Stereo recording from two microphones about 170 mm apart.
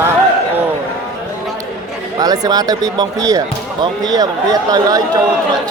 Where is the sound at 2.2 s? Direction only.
20° right (ahead or behind).